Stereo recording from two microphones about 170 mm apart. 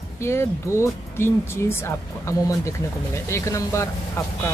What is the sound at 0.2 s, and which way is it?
Speech, 15° left (ahead or behind).